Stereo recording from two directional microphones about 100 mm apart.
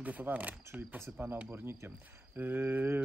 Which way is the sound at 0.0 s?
15° right (ahead or behind).